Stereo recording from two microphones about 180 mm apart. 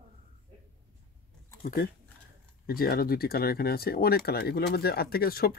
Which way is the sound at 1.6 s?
60° left (ahead or behind).